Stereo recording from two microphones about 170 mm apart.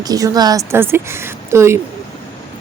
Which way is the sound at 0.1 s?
20° right (ahead or behind).